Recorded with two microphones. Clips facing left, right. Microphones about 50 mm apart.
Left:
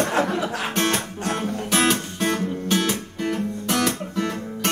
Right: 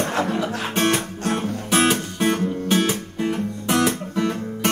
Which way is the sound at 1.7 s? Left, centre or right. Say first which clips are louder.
Right 2 dB; centre.